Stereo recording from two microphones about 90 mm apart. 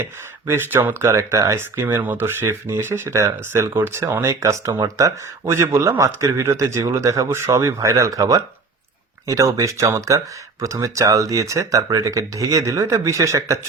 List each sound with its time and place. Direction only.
0.0 s speech: 25° right (ahead or behind)